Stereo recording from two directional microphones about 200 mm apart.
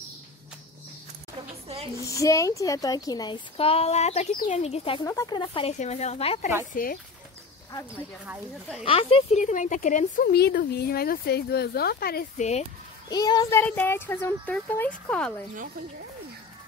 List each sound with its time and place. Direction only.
2.0 s speech: 15° left (ahead or behind)
5.0 s speech: 15° left (ahead or behind)
6.7 s speech: 45° left (ahead or behind)
8.8 s speech: 25° left (ahead or behind); by 12.3 s 50° left (ahead or behind)
12.4 s speech: 35° left (ahead or behind)
13.1 s speech: 20° left (ahead or behind)